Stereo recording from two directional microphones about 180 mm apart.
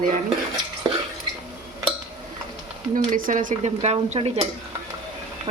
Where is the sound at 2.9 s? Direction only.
50° right (ahead or behind).